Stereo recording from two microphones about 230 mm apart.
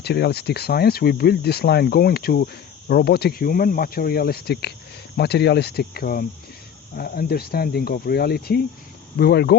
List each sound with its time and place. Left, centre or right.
0.0 s speech: left